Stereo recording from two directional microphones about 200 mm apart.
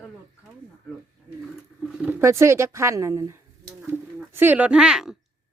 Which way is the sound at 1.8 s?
10° right (ahead or behind).